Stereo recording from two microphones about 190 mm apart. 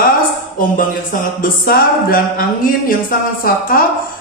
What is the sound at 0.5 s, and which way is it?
Music, 45° left (ahead or behind).